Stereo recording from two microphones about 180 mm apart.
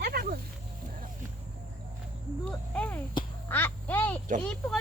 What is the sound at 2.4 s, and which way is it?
Cricket, 5° left (ahead or behind).